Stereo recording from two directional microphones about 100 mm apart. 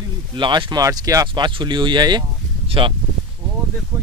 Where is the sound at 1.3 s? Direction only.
55° right (ahead or behind).